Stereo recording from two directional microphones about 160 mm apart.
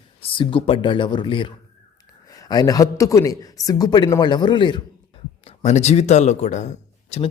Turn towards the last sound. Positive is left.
turn(degrees=45)  # may be behind; listen again after turning